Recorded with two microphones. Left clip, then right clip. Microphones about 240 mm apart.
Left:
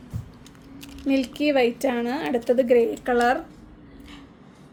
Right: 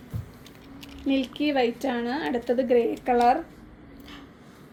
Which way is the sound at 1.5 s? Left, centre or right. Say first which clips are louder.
Left 4 dB; left.